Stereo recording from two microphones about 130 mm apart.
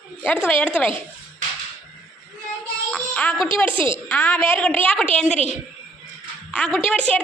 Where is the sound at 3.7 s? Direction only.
40° right (ahead or behind).